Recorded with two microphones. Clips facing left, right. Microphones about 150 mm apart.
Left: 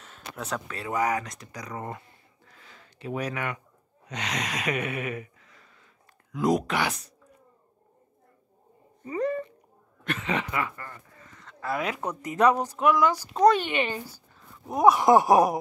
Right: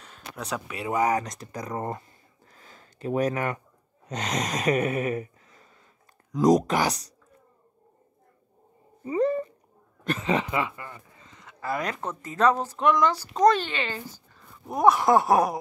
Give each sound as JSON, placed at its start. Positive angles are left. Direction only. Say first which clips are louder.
{"t": 0.0, "sound": "a sound", "louder": "even", "side_deg": 0}
{"t": 0.7, "sound": "speech", "louder": "right 3 dB", "side_deg": -15}
{"t": 4.1, "sound": "gasp", "louder": "right 3 dB", "side_deg": -40}
{"t": 6.3, "sound": "speech", "louder": "right 4 dB", "side_deg": -40}
{"t": 9.0, "sound": "a sound", "louder": "right 4 dB", "side_deg": -25}
{"t": 10.0, "sound": "speech", "louder": "right 4 dB", "side_deg": -35}
{"t": 11.4, "sound": "speech", "louder": "even", "side_deg": 0}